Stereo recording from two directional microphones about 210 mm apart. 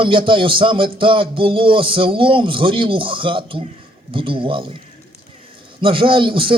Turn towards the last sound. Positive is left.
turn(degrees=-25)  # may be behind; listen again after turning